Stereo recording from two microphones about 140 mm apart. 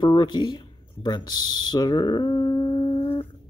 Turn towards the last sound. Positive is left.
turn(degrees=40)  # may be behind; listen again after turning